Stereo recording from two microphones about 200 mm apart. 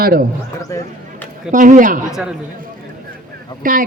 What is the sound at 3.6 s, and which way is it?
Speech, 40° right (ahead or behind).